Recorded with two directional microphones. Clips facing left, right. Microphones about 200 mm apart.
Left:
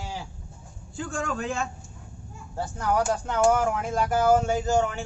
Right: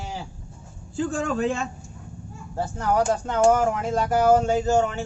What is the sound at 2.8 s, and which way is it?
Speech, 10° right (ahead or behind).